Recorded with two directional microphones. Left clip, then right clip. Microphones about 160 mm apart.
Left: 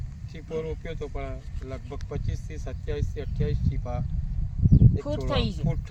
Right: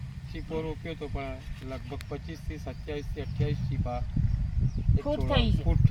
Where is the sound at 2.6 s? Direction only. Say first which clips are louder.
Left 3 dB; 25° left (ahead or behind).